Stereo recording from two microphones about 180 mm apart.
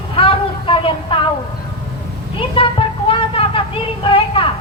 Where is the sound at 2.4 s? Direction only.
30° left (ahead or behind).